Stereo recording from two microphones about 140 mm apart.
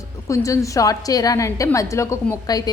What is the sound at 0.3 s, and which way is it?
A woman's voice, 20° left (ahead or behind).